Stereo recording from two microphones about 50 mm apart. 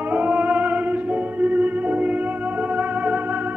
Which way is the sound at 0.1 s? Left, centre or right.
Right.